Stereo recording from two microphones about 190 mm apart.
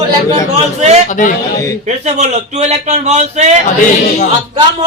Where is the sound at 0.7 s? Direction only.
35° right (ahead or behind).